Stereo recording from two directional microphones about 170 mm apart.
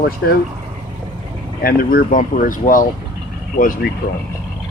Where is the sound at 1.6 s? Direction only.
60° left (ahead or behind).